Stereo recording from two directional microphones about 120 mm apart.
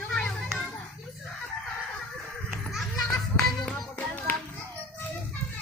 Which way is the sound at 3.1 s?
Centre (ahead or behind).